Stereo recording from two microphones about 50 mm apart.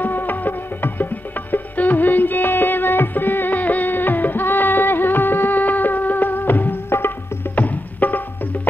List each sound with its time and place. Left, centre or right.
0.0 s music: left